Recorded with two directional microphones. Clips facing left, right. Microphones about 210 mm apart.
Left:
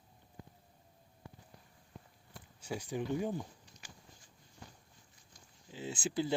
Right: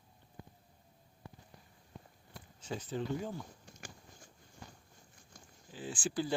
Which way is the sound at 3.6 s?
50° right (ahead or behind).